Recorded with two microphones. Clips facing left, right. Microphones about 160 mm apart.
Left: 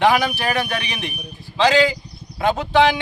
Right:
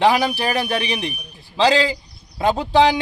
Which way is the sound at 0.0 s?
30° right (ahead or behind).